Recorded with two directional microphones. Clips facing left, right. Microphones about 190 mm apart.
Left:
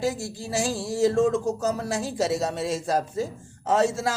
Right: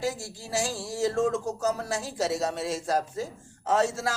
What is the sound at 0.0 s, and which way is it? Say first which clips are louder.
Speech: left 4 dB; 25° left (ahead or behind).